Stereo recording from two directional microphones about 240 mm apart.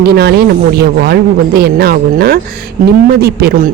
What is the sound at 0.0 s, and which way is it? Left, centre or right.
Speech, right.